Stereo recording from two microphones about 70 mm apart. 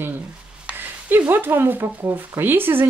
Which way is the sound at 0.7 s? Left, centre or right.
Right.